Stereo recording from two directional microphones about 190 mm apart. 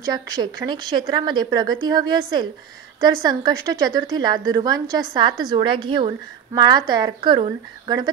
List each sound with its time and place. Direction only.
0.0 s a woman's voice: 20° right (ahead or behind)